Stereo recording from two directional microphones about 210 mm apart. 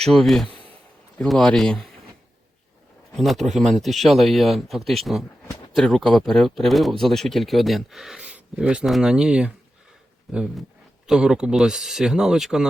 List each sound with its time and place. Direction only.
0.0 s speech: centre (ahead or behind)
0.5 s a sound: 25° right (ahead or behind)
1.2 s speech: 5° left (ahead or behind)
3.2 s speech: centre (ahead or behind)